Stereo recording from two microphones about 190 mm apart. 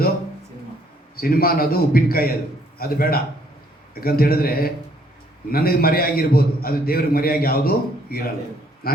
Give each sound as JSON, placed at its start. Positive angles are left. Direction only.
{"t": 1.2, "sound": "a man's voice", "side_deg": 50}